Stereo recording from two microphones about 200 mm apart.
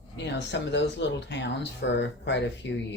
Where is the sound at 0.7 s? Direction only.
60° left (ahead or behind).